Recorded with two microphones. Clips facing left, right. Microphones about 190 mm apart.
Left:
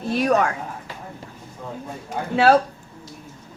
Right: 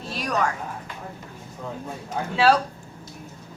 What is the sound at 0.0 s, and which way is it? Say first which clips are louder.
Speech: left 8 dB; 55° left (ahead or behind).